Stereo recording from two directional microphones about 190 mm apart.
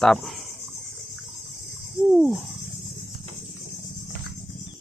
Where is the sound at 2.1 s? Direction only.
5° right (ahead or behind).